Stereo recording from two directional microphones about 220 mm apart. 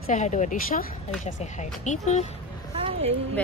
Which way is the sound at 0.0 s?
35° left (ahead or behind).